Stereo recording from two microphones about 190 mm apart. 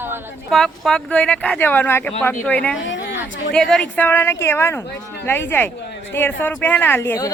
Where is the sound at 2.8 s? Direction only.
75° left (ahead or behind).